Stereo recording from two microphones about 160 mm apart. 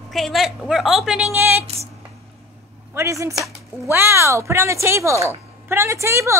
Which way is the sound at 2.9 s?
15° right (ahead or behind).